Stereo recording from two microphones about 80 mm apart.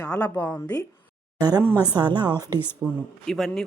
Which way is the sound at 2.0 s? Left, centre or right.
Right.